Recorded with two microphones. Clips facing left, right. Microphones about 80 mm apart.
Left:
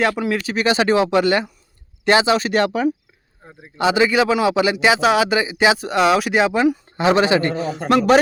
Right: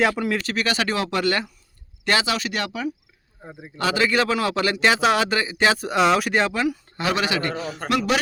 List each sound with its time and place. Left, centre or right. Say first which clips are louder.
0.0 s speech: left 2 dB; centre
0.5 s a man's voice: left 7 dB; left
3.4 s a man's voice: right 4 dB; centre
3.8 s speech: left 5 dB; centre
6.5 s a man's voice: left 7 dB; left